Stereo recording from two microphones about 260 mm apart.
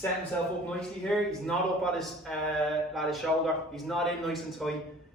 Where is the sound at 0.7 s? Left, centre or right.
Centre.